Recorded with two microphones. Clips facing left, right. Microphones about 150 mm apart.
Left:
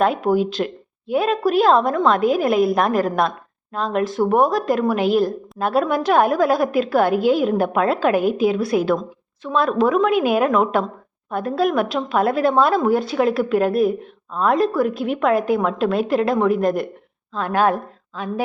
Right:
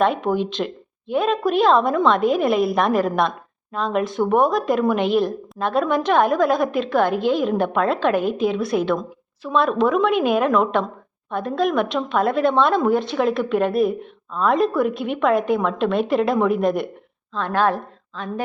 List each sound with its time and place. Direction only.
0.0 s a woman's voice: centre (ahead or behind)
17.3 s a woman's voice: 10° left (ahead or behind)